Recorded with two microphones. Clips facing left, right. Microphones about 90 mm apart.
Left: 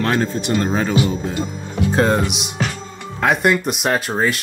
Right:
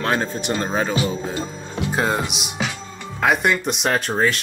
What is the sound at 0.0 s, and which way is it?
Speech, 20° right (ahead or behind).